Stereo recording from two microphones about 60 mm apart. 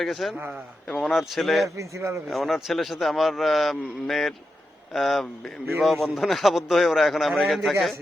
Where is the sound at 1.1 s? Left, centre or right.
Centre.